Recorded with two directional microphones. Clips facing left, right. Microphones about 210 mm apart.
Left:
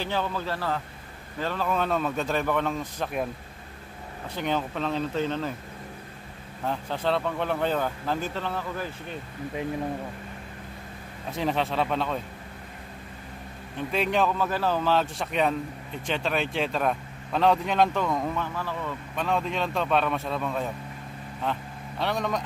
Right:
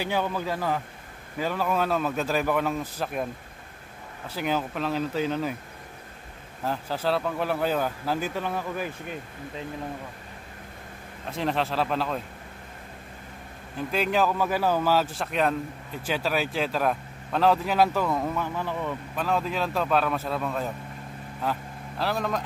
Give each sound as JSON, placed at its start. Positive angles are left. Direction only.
{"t": 0.0, "sound": "speech", "side_deg": -15}
{"t": 4.4, "sound": "speech", "side_deg": -5}
{"t": 6.6, "sound": "speech", "side_deg": -5}
{"t": 11.2, "sound": "speech", "side_deg": 0}
{"t": 13.7, "sound": "speech", "side_deg": 0}
{"t": 18.5, "sound": "speech", "side_deg": -15}
{"t": 19.1, "sound": "speech", "side_deg": 0}